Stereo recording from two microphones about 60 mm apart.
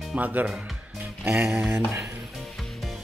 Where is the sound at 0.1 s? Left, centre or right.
Right.